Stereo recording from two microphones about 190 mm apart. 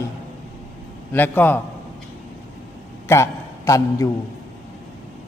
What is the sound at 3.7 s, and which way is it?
Speech, 15° left (ahead or behind).